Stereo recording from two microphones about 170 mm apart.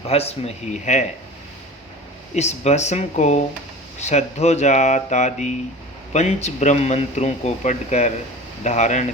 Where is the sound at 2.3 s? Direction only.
40° left (ahead or behind).